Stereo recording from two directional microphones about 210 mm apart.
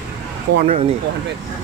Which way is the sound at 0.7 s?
30° right (ahead or behind).